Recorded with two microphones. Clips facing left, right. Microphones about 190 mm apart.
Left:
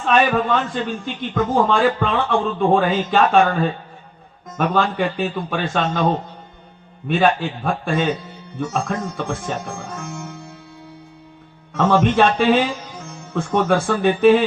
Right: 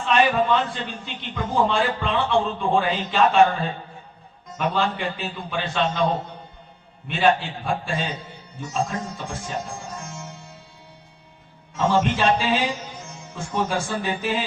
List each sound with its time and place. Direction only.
0.0 s speech: 50° left (ahead or behind)
7.1 s a man's voice: 50° left (ahead or behind)
11.7 s speech: 60° left (ahead or behind)